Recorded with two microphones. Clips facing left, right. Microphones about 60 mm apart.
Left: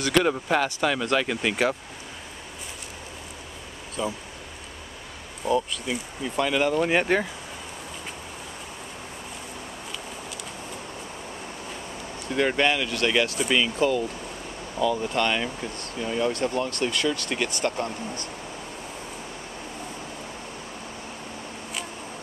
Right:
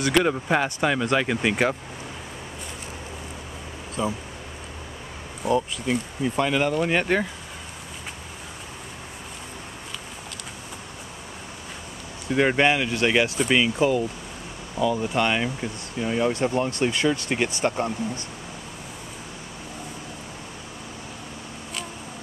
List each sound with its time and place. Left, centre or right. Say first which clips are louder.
0.0 s speech: right 1 dB; centre
4.0 s speech: right 2 dB; centre
5.4 s speech: right 1 dB; centre
12.3 s speech: right 3 dB; centre